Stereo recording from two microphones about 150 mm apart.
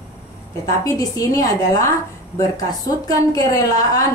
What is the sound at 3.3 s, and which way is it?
Speech, 25° left (ahead or behind).